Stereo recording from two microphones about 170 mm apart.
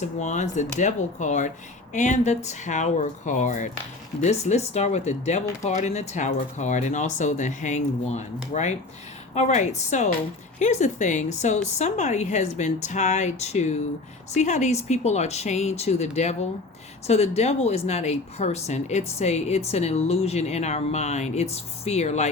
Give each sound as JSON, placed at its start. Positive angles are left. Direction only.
{"t": 0.2, "sound": "a woman's voice", "side_deg": 45}